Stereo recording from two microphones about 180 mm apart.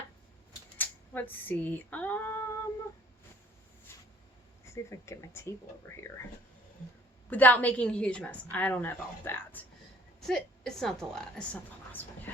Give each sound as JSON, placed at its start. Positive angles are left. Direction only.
{"t": 0.8, "sound": "female singing", "side_deg": 10}
{"t": 3.9, "sound": "a sound", "side_deg": 15}
{"t": 4.6, "sound": "a woman's voice", "side_deg": 15}
{"t": 7.3, "sound": "a woman's voice", "side_deg": 10}